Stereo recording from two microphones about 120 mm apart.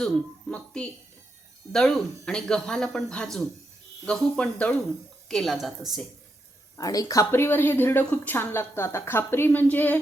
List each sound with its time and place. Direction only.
0.5 s speech: 10° left (ahead or behind)
6.7 s speech: 30° left (ahead or behind); by 10.0 s 15° left (ahead or behind)